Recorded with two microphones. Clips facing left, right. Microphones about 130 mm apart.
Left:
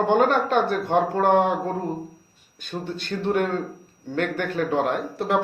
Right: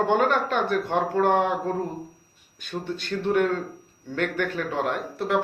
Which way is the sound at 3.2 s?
40° left (ahead or behind).